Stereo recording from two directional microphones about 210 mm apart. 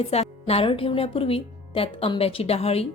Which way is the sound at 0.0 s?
30° left (ahead or behind).